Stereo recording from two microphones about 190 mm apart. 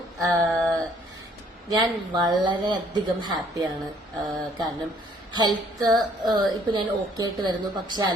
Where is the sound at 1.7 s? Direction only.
25° right (ahead or behind).